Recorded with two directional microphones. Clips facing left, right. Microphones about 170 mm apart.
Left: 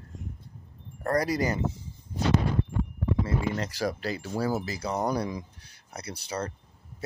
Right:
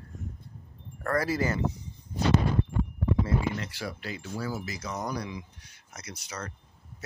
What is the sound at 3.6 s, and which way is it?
Speech, 40° left (ahead or behind).